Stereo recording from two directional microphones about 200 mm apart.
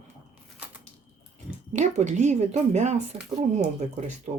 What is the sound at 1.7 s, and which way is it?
Speech, 35° right (ahead or behind).